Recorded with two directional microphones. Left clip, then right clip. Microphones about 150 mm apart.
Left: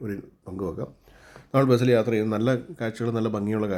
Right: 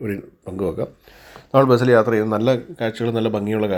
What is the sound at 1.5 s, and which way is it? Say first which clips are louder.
A man's voice: right 7 dB; 5° left (ahead or behind).